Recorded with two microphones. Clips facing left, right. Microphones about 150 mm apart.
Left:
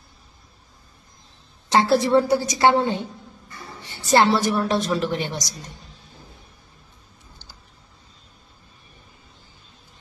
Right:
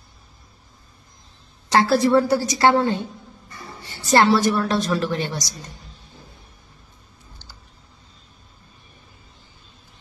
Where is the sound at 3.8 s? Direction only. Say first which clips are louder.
Even; 20° left (ahead or behind).